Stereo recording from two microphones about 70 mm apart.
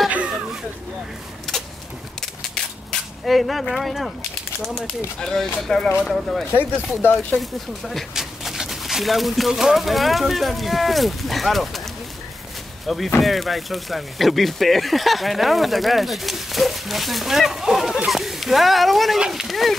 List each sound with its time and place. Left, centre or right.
0.1 s a sound: centre
2.5 s cap gun: centre
5.2 s speech: centre
7.0 s speech: left
7.3 s speech: centre
12.8 s speech: centre